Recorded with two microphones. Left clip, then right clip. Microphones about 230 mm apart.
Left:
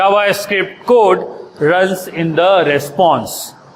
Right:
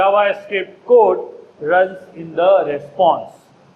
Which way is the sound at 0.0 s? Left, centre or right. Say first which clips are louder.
Left 2 dB; left.